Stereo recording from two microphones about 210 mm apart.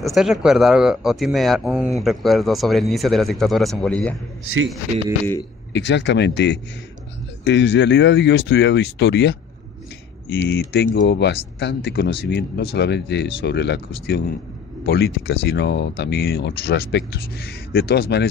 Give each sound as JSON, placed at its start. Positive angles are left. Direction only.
{"t": 0.1, "sound": "speech", "side_deg": 0}
{"t": 5.7, "sound": "speech", "side_deg": 55}